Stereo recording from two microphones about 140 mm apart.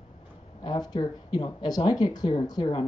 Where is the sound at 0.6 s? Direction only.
30° left (ahead or behind).